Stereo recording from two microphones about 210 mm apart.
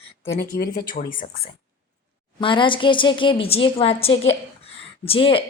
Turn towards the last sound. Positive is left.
turn(degrees=25)  # may be behind; listen again after turning